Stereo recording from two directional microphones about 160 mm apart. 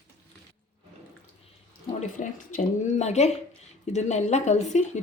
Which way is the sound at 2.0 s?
55° left (ahead or behind).